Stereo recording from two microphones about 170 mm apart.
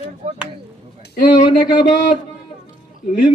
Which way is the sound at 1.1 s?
55° left (ahead or behind).